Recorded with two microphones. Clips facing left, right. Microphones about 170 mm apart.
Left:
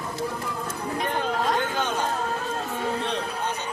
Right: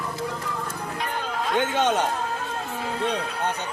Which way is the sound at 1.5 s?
80° right.